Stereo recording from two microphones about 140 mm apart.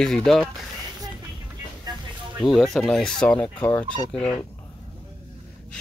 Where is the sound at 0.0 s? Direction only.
5° left (ahead or behind).